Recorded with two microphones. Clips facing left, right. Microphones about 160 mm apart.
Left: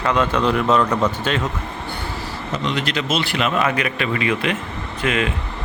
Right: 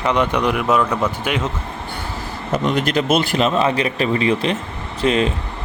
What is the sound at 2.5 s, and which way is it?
A man's voice, 50° right (ahead or behind).